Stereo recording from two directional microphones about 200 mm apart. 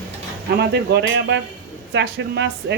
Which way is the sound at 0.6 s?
55° right (ahead or behind).